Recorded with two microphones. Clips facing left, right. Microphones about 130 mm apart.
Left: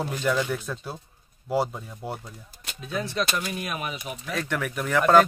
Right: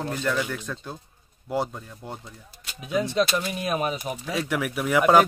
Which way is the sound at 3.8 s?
35° right (ahead or behind).